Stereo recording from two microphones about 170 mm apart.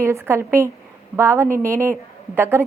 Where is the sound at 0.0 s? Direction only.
15° right (ahead or behind).